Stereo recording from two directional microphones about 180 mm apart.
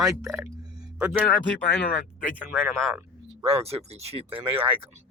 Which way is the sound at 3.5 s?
35° right (ahead or behind).